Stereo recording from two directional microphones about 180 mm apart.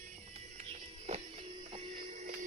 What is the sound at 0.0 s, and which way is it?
Music, 40° right (ahead or behind).